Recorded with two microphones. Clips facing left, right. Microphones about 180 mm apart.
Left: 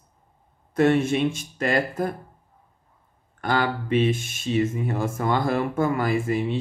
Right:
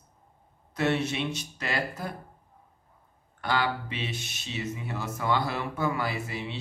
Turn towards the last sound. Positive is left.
turn(degrees=50)  # may be behind; listen again after turning